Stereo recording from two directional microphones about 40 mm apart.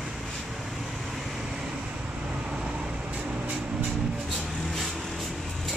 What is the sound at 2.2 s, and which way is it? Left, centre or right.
Vehicle, right.